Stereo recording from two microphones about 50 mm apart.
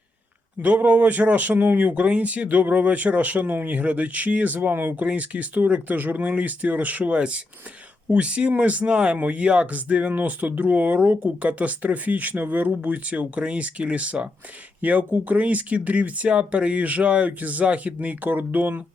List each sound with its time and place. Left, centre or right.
0.6 s speech: right
5.0 s speech: right